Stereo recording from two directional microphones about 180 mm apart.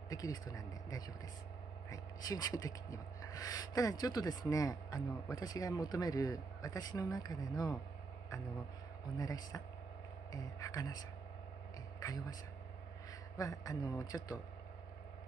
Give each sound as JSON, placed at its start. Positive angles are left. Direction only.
{"t": 0.1, "sound": "speech", "side_deg": 20}
{"t": 9.2, "sound": "speech", "side_deg": 20}
{"t": 13.4, "sound": "speech", "side_deg": 20}